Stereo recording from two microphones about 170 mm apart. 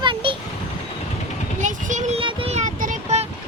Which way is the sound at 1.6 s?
45° right (ahead or behind).